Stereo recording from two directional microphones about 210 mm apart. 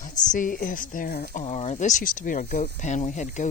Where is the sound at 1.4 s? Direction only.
30° left (ahead or behind).